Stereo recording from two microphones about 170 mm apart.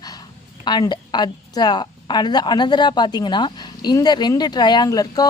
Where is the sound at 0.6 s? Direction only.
25° left (ahead or behind).